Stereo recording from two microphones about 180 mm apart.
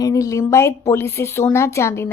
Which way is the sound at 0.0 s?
20° left (ahead or behind).